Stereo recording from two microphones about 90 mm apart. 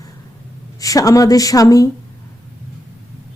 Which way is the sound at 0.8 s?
40° left (ahead or behind).